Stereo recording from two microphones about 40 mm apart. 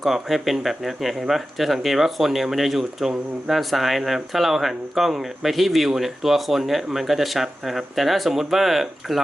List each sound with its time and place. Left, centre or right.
0.0 s speech: centre